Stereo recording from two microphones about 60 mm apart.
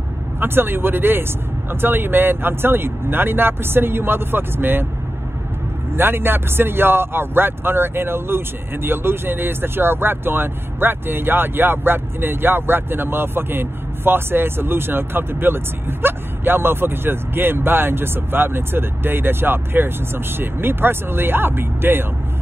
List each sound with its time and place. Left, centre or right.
0.4 s speech: right
5.9 s speech: right